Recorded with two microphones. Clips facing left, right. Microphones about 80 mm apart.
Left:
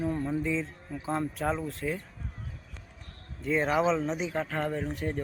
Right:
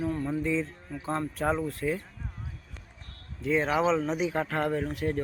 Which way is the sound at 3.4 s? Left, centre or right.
Centre.